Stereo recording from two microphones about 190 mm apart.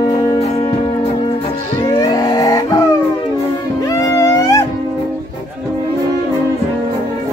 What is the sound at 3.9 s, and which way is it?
Music, 20° left (ahead or behind).